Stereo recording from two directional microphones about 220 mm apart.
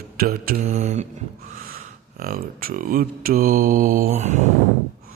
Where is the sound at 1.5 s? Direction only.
40° right (ahead or behind).